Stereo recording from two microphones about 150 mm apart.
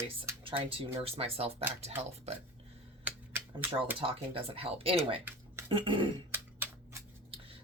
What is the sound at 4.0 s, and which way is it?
Speech, 40° right (ahead or behind).